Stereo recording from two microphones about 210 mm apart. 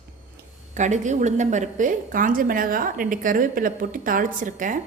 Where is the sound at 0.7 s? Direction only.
35° right (ahead or behind).